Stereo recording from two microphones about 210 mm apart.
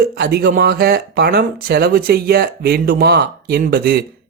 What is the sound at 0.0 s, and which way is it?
Speech, 50° right (ahead or behind).